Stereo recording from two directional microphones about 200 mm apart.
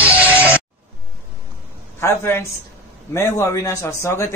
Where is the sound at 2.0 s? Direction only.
10° left (ahead or behind).